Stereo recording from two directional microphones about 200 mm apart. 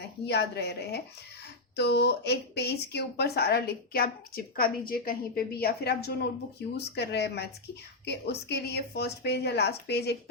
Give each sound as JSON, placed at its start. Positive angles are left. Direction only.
{"t": 0.3, "sound": "a woman's voice", "side_deg": 55}